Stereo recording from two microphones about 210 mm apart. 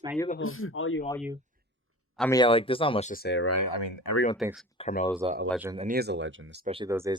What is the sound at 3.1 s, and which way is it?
Speech, 50° left (ahead or behind).